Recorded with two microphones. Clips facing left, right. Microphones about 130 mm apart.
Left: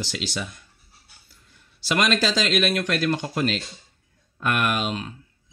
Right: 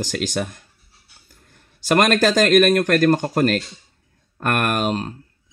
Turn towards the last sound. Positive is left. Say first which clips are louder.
# right 4 dB
turn(degrees=-45)  # may be behind; listen again after turning